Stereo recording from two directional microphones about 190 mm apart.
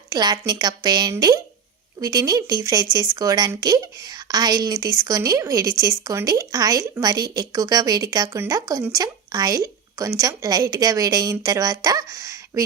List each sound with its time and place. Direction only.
0.1 s a woman's voice: 20° right (ahead or behind)